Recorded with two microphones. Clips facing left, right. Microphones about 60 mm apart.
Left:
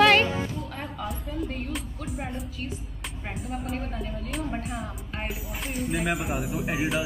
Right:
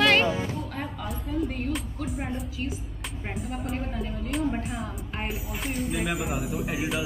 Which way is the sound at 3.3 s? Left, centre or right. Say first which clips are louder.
Even; centre.